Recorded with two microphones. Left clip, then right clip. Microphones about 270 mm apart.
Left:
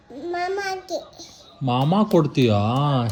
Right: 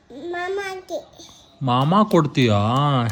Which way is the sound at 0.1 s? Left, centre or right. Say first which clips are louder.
Left 1 dB; centre.